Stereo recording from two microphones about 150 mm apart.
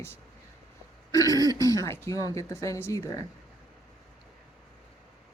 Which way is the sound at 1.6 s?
20° left (ahead or behind).